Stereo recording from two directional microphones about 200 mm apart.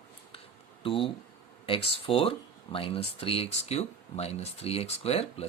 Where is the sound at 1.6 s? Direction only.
25° left (ahead or behind).